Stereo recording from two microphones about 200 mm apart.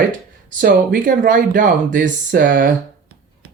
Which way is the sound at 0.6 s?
45° right (ahead or behind).